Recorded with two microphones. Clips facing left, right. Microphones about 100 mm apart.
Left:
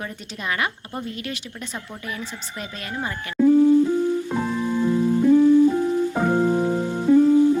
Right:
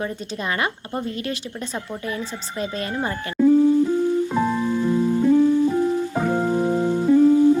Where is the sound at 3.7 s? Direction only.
15° right (ahead or behind).